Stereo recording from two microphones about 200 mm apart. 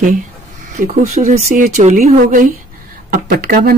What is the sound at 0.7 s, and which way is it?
Speech, 35° right (ahead or behind).